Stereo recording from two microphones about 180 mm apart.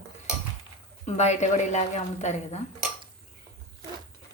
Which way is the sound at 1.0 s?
40° left (ahead or behind).